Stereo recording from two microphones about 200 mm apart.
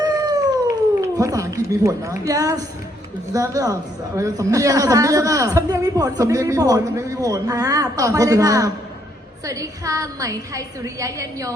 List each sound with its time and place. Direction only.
0.0 s cat: 20° right (ahead or behind)
1.0 s a woman's voice: 15° right (ahead or behind)